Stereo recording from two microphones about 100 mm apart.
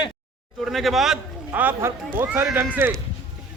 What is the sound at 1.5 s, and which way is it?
Speech, 20° right (ahead or behind).